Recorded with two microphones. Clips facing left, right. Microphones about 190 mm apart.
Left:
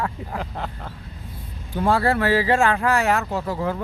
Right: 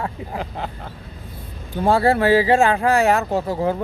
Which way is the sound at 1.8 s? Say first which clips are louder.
Right 3 dB; 25° right (ahead or behind).